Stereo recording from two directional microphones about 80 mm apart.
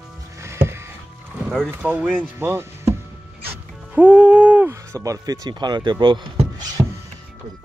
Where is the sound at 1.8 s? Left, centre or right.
Right.